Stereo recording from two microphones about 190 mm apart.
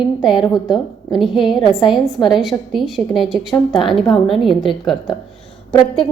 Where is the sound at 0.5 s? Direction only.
Centre (ahead or behind).